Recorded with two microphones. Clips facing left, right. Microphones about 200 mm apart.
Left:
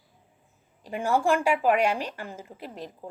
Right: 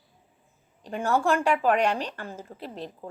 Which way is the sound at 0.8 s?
10° left (ahead or behind).